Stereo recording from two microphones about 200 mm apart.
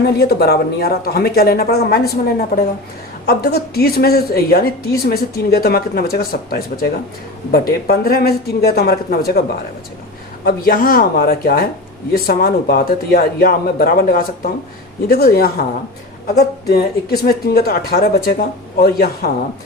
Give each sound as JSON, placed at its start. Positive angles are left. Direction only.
{"t": 0.0, "sound": "a woman's voice", "side_deg": 50}
{"t": 3.2, "sound": "a woman's voice", "side_deg": 50}